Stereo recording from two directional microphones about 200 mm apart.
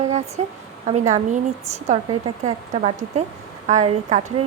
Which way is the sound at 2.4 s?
35° right (ahead or behind).